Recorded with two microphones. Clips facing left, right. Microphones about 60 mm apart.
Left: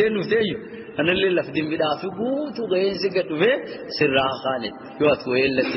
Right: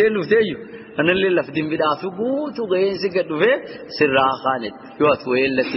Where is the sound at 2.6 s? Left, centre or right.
Right.